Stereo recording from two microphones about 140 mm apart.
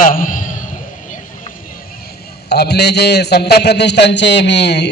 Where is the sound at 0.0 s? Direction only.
80° left.